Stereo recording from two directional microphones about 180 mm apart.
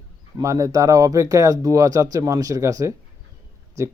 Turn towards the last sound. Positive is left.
turn(degrees=-15)  # may be behind; listen again after turning